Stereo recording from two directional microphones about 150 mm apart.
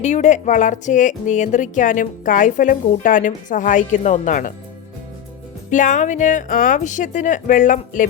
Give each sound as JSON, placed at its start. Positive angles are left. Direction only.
{"t": 0.0, "sound": "speech", "side_deg": 50}
{"t": 5.7, "sound": "speech", "side_deg": 55}